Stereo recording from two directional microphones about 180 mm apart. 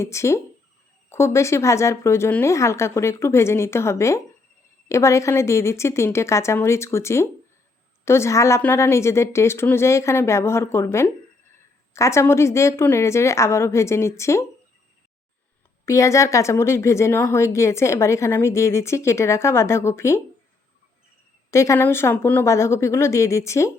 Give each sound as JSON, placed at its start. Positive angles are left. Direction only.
{"t": 0.0, "sound": "speech", "side_deg": 15}
{"t": 15.9, "sound": "speech", "side_deg": 15}
{"t": 21.5, "sound": "speech", "side_deg": 15}